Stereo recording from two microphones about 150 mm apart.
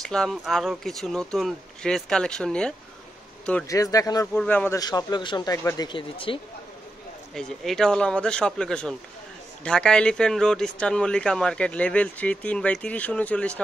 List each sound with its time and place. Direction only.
0.0 s speech: 5° left (ahead or behind)
3.6 s a man's voice: 20° left (ahead or behind)
4.4 s speech: 10° left (ahead or behind)
4.7 s a man's voice: 25° left (ahead or behind)
5.9 s speech: 35° left (ahead or behind)
7.3 s speech: 5° left (ahead or behind)